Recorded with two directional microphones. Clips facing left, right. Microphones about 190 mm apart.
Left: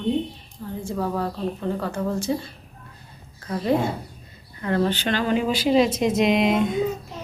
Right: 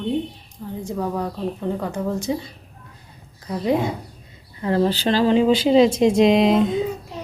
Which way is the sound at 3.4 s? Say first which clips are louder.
Right 1 dB; 15° right (ahead or behind).